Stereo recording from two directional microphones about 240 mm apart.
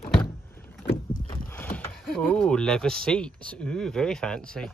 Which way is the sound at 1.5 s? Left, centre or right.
Centre.